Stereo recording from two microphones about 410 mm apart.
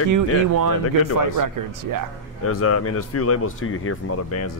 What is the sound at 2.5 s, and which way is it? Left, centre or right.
Speech, left.